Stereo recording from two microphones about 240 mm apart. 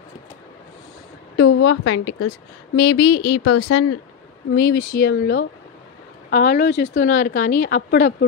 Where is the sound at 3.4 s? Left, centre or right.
Left.